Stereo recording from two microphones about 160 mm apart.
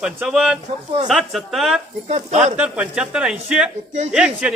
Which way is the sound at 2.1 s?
45° right (ahead or behind).